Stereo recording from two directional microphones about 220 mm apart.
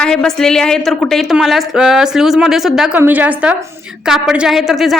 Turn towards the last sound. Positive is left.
turn(degrees=0)  # may be behind; listen again after turning